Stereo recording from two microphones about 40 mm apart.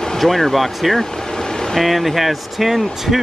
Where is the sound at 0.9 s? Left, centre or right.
Centre.